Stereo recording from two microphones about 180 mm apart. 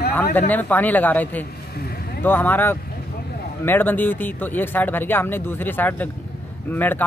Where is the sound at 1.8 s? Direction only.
55° left (ahead or behind).